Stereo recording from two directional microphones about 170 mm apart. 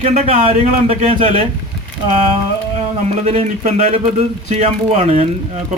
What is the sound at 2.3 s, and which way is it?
Speech, 35° right (ahead or behind).